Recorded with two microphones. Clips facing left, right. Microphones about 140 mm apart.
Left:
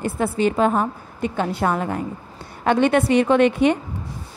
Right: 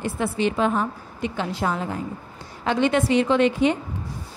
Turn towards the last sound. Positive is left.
turn(degrees=60)  # may be behind; listen again after turning